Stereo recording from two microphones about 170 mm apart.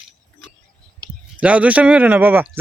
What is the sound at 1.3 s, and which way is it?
Speech, 10° right (ahead or behind).